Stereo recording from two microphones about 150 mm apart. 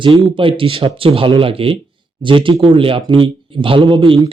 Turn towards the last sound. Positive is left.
turn(degrees=-35)  # may be behind; listen again after turning